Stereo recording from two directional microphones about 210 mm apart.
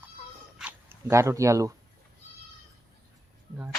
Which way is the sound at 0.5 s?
10° right (ahead or behind).